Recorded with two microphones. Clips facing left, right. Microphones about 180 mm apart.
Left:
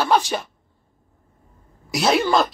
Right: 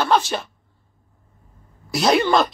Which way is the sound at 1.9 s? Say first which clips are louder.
Right 1 dB; 5° left (ahead or behind).